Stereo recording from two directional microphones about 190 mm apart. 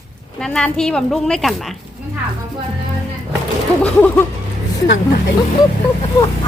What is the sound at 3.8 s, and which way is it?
Speech, 5° left (ahead or behind).